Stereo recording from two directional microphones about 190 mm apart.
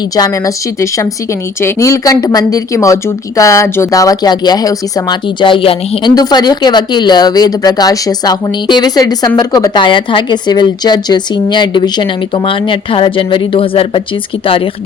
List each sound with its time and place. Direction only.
0.2 s a woman's voice: 15° left (ahead or behind)